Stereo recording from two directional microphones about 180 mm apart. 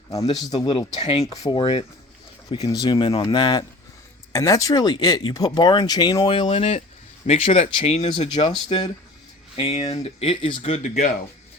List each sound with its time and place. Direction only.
0.1 s speech: 20° left (ahead or behind)
1.3 s speech: 20° left (ahead or behind); by 11.1 s 40° left (ahead or behind)